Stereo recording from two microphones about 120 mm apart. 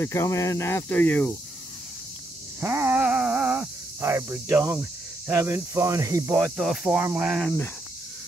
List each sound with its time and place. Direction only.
0.0 s speech: 25° left (ahead or behind)
2.6 s a sound: 20° right (ahead or behind)
4.0 s speech: 20° right (ahead or behind)
6.3 s speech: 10° right (ahead or behind)